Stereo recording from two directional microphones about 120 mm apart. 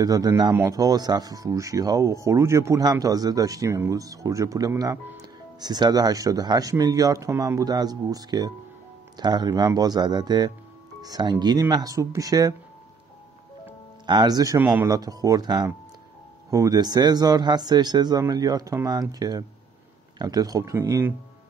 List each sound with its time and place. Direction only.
0.0 s speech: 30° right (ahead or behind)
14.0 s speech: 35° right (ahead or behind)
14.6 s speech: 20° right (ahead or behind)
14.9 s speech: 30° right (ahead or behind)